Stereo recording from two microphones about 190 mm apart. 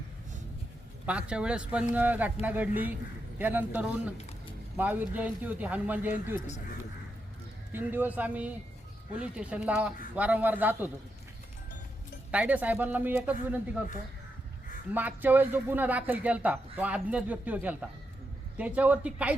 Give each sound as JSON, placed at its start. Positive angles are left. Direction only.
{"t": 1.0, "sound": "a man's voice", "side_deg": -5}
{"t": 7.7, "sound": "a man's voice", "side_deg": -10}
{"t": 12.3, "sound": "a man's voice", "side_deg": -5}
{"t": 14.9, "sound": "a man's voice", "side_deg": -10}